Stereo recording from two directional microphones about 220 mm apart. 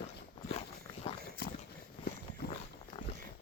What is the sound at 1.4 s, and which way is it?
Horse, 45° left (ahead or behind).